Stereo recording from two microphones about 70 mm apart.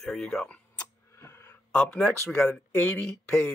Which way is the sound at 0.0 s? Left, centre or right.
Centre.